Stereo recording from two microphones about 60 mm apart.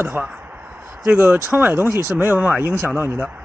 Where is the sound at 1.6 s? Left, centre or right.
Right.